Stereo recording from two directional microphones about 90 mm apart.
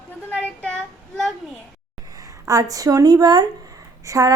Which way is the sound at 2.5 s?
40° right (ahead or behind).